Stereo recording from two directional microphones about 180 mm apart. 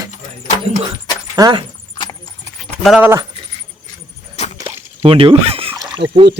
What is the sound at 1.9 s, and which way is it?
Horse, 25° left (ahead or behind).